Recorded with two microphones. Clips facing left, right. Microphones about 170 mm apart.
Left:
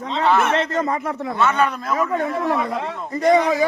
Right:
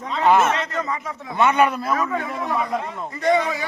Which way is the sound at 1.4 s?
15° right (ahead or behind).